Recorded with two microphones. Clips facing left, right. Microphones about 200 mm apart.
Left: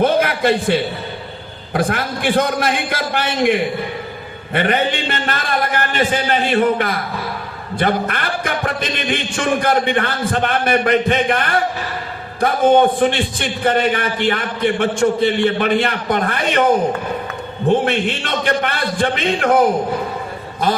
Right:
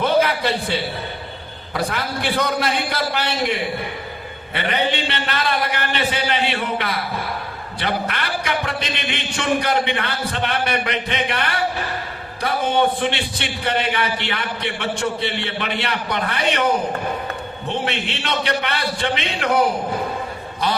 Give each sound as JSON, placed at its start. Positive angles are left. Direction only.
{"t": 0.0, "sound": "a sound", "side_deg": 50}
{"t": 1.7, "sound": "a man's voice", "side_deg": 50}
{"t": 4.5, "sound": "a man's voice", "side_deg": 45}
{"t": 17.7, "sound": "a man's voice", "side_deg": 50}